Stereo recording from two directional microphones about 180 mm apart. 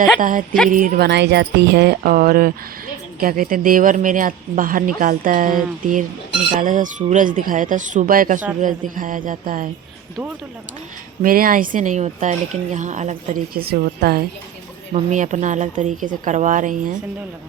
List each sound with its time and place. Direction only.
0.2 s speech: 50° right (ahead or behind)
11.2 s speech: 50° right (ahead or behind)
14.9 s speech: 40° right (ahead or behind)